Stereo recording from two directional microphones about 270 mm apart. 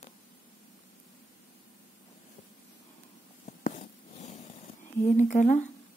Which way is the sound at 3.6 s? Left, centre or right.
Left.